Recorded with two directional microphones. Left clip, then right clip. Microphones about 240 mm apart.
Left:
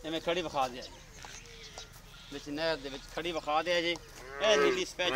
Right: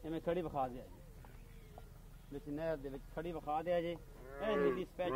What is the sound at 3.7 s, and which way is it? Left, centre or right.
Cattle, right.